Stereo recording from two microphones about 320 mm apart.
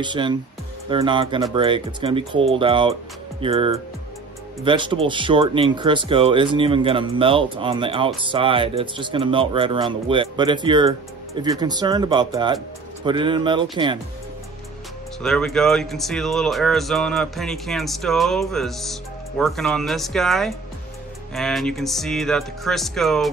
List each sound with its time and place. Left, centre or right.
0.0 s speech: centre
15.2 s speech: centre